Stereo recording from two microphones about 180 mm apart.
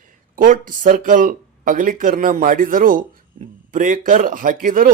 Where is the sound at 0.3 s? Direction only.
50° right (ahead or behind).